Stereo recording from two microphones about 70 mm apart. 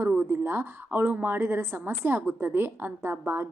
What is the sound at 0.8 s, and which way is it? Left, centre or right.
A woman's voice, right.